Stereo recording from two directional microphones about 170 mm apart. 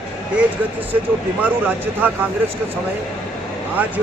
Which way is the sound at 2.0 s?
10° right (ahead or behind).